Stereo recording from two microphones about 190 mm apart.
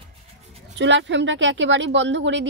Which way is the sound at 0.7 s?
70° right (ahead or behind).